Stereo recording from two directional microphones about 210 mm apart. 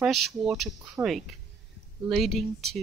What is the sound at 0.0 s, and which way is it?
Speech, centre (ahead or behind).